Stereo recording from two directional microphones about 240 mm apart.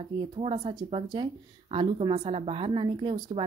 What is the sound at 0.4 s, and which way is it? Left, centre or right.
A woman's voice, right.